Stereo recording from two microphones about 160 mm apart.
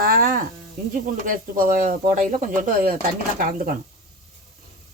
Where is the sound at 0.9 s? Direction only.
55° right (ahead or behind).